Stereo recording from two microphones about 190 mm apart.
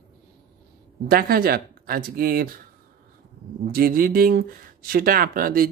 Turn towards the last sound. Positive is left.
turn(degrees=-50)  # may be behind; listen again after turning